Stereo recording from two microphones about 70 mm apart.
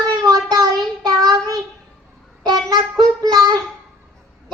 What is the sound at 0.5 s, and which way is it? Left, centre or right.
Child singing, right.